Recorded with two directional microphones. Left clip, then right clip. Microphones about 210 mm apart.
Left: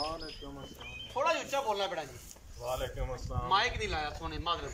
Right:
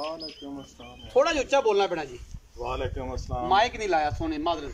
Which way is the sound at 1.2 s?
50° right (ahead or behind).